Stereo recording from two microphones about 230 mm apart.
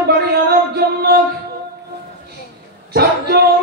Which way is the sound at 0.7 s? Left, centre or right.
Right.